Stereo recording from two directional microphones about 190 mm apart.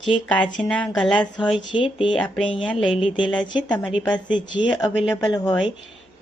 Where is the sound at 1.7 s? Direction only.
25° left (ahead or behind).